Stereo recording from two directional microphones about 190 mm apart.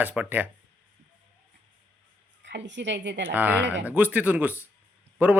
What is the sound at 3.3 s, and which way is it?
Speech, 10° right (ahead or behind).